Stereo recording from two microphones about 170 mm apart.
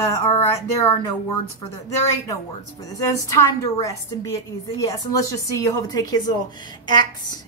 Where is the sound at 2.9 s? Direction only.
20° left (ahead or behind).